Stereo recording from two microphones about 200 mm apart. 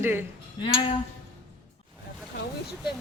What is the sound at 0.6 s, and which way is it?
Speech, 25° left (ahead or behind).